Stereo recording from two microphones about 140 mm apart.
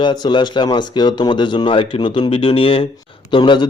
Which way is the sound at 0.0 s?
35° left (ahead or behind).